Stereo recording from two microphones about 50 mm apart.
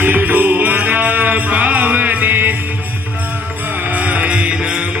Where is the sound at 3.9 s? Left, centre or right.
Right.